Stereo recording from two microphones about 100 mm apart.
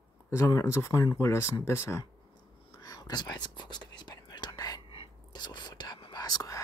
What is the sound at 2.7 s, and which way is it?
Whispering, 40° left (ahead or behind).